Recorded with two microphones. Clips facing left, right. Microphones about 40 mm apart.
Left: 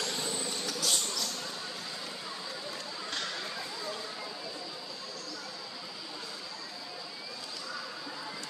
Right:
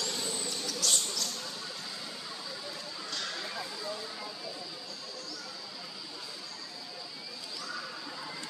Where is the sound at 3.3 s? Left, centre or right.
Centre.